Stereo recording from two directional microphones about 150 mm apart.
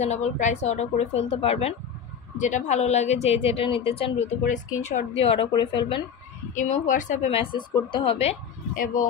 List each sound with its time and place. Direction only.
0.0 s a woman's voice: 50° left (ahead or behind)
2.3 s a woman's voice: 55° left (ahead or behind); by 6.0 s 35° left (ahead or behind)
6.5 s a woman's voice: 55° left (ahead or behind)
7.2 s a woman's voice: 40° left (ahead or behind)
8.7 s speech: 60° left (ahead or behind)